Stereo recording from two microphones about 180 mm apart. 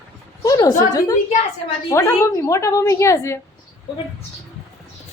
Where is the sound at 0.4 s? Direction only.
20° left (ahead or behind).